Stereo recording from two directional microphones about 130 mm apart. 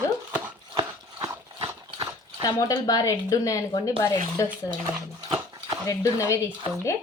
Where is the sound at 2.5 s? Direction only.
30° left (ahead or behind).